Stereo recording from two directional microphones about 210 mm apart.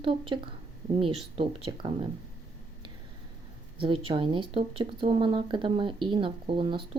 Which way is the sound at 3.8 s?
25° right (ahead or behind).